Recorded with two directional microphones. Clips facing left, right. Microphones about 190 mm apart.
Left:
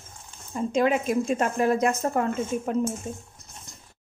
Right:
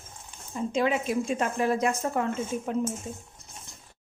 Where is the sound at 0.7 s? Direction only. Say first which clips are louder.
Left 3 dB; 45° left (ahead or behind).